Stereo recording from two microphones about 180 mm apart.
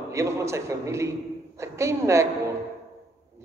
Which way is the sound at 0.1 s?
15° right (ahead or behind).